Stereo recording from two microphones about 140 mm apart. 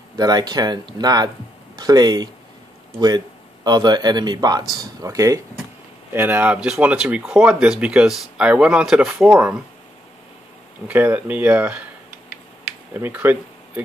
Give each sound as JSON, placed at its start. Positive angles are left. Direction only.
{"t": 0.1, "sound": "a man's voice", "side_deg": -30}
{"t": 3.6, "sound": "a man's voice", "side_deg": -30}
{"t": 6.1, "sound": "speech", "side_deg": -15}
{"t": 10.9, "sound": "speech", "side_deg": -10}
{"t": 12.9, "sound": "speech", "side_deg": -15}